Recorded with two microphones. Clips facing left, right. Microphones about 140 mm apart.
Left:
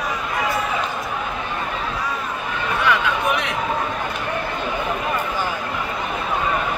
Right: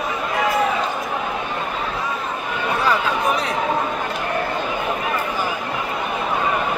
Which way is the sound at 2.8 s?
35° right (ahead or behind).